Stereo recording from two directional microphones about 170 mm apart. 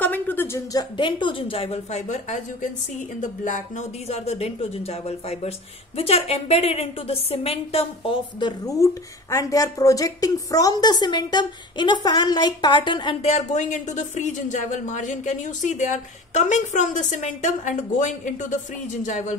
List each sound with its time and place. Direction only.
0.0 s a sound: 10° left (ahead or behind)
0.9 s a woman's voice: 30° left (ahead or behind)
13.3 s speech: 45° left (ahead or behind)